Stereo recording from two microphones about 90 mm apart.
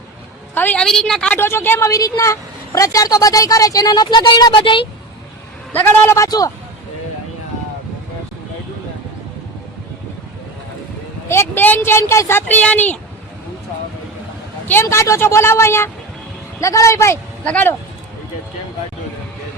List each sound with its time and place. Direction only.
0.5 s a woman's voice: 20° left (ahead or behind)
0.8 s a woman's voice: 5° left (ahead or behind)
1.3 s a woman's voice: 25° left (ahead or behind); by 4.9 s 65° left (ahead or behind)
5.7 s speech: 20° left (ahead or behind)
6.1 s a woman's voice: 40° left (ahead or behind)
11.3 s speech: 25° left (ahead or behind)
14.7 s a woman's voice: 30° left (ahead or behind)
17.4 s speech: 15° left (ahead or behind)